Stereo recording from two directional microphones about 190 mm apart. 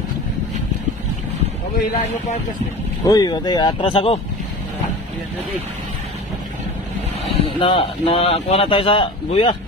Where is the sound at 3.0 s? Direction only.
20° left (ahead or behind).